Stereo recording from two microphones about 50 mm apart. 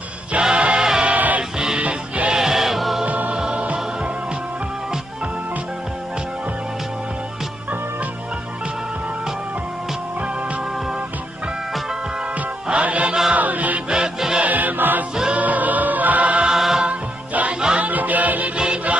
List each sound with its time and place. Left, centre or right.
0.3 s music: centre
1.1 s music: right
1.6 s music: centre
2.3 s choir: centre
3.1 s music: right
12.6 s music: right
13.8 s music: centre
14.4 s music: right
16.4 s music: centre
16.8 s music: right